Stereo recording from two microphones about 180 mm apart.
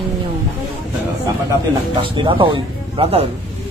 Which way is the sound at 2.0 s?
30° right (ahead or behind).